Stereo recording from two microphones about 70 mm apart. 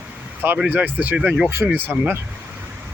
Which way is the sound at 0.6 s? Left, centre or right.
Right.